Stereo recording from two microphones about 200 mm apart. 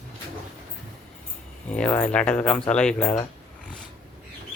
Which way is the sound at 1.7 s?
5° left (ahead or behind).